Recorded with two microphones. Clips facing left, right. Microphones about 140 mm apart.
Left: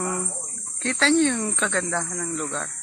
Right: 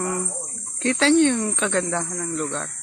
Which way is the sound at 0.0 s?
Centre (ahead or behind).